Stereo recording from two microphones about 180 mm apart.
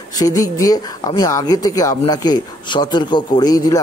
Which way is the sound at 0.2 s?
20° left (ahead or behind).